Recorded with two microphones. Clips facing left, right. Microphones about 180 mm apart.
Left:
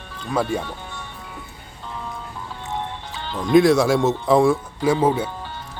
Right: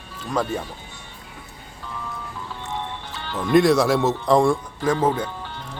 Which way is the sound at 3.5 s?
Centre (ahead or behind).